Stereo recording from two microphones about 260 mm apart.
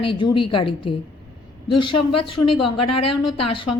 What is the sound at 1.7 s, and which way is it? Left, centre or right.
A woman's voice, left.